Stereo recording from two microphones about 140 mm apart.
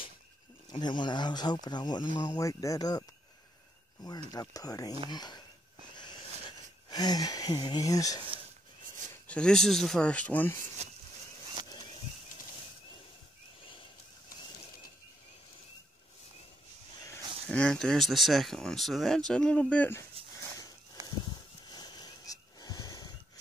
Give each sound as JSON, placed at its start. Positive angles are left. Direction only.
{"t": 0.7, "sound": "speech", "side_deg": 30}
{"t": 4.3, "sound": "speech", "side_deg": 25}
{"t": 5.9, "sound": "a sound", "side_deg": 30}
{"t": 6.9, "sound": "speech", "side_deg": 30}
{"t": 9.3, "sound": "speech", "side_deg": 5}
{"t": 11.7, "sound": "a sound", "side_deg": 35}
{"t": 17.5, "sound": "speech", "side_deg": 5}
{"t": 20.5, "sound": "a sound", "side_deg": 25}
{"t": 21.6, "sound": "wheeze", "side_deg": 30}